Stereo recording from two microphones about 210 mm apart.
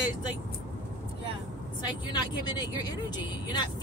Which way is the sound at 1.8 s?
20° left (ahead or behind).